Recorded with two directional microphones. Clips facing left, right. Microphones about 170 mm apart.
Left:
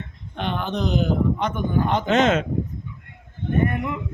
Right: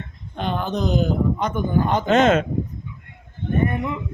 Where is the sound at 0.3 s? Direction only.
40° right (ahead or behind).